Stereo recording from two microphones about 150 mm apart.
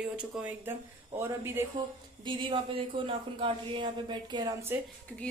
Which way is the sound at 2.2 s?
35° right (ahead or behind).